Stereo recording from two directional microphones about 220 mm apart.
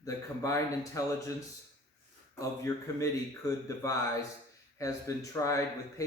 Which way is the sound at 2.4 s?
15° left (ahead or behind).